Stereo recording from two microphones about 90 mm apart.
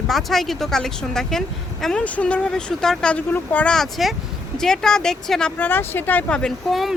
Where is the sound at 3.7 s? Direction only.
Centre (ahead or behind).